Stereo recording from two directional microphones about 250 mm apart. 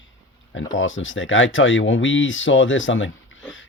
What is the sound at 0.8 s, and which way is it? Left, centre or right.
Speech, left.